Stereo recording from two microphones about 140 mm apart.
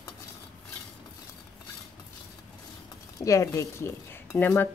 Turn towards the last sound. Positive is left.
turn(degrees=15)  # may be behind; listen again after turning